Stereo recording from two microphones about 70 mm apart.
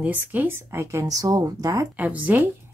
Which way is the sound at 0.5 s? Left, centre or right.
Right.